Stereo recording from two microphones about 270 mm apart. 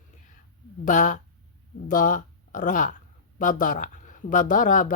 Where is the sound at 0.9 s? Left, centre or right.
Left.